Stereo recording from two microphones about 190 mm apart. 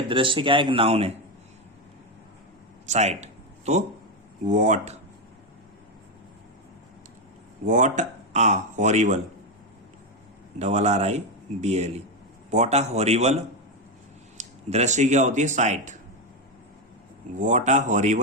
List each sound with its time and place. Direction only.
0.1 s speech: 25° right (ahead or behind)
2.8 s speech: 35° right (ahead or behind)
7.7 s speech: 40° right (ahead or behind)
10.6 s speech: 35° right (ahead or behind)
17.3 s speech: 40° right (ahead or behind)